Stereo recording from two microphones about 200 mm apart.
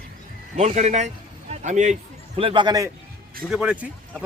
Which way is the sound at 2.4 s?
25° right (ahead or behind).